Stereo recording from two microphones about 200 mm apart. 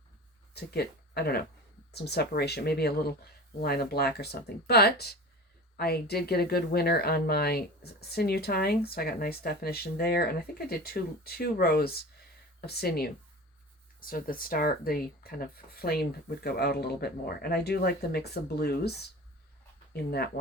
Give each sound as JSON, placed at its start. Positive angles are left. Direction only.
{"t": 0.5, "sound": "a woman's voice", "side_deg": 55}